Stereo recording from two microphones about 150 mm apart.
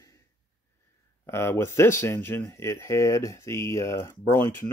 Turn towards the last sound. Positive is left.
turn(degrees=15)  # may be behind; listen again after turning